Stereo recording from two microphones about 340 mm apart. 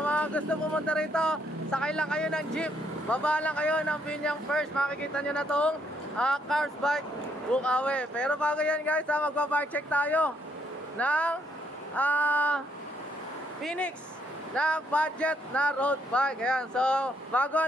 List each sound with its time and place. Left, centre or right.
0.0 s speech: centre